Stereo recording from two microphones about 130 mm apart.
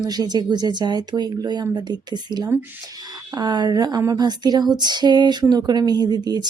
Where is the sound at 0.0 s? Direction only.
30° right (ahead or behind).